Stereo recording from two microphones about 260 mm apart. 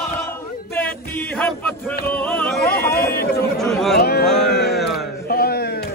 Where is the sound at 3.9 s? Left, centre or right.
Left.